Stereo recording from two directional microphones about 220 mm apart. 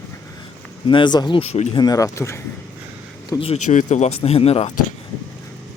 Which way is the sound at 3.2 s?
25° left (ahead or behind).